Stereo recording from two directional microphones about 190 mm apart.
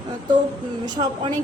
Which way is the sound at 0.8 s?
25° right (ahead or behind).